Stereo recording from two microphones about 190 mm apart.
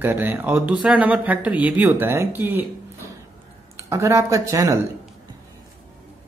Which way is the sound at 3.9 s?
15° right (ahead or behind).